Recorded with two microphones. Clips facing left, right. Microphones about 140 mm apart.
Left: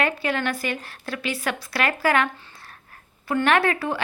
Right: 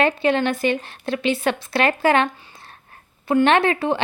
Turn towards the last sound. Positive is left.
turn(degrees=-25)  # may be behind; listen again after turning